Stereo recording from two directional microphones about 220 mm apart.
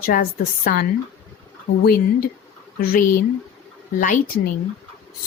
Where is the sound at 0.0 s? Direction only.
40° left (ahead or behind).